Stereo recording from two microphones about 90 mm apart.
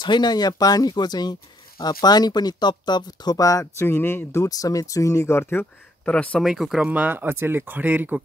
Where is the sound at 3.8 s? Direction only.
25° left (ahead or behind).